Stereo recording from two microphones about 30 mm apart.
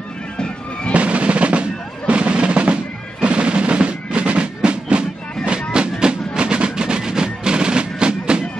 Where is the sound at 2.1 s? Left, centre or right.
Right.